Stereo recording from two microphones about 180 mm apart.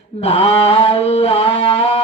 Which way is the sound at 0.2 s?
35° left (ahead or behind).